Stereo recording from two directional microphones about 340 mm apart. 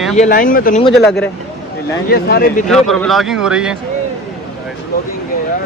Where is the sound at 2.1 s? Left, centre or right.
Left.